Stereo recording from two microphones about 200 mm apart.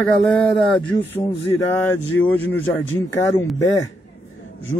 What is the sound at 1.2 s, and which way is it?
Speech, 10° left (ahead or behind).